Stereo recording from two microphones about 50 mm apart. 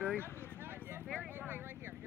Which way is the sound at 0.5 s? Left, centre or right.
Right.